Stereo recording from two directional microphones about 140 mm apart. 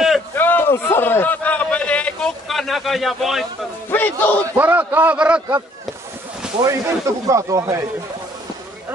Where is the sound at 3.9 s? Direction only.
15° left (ahead or behind).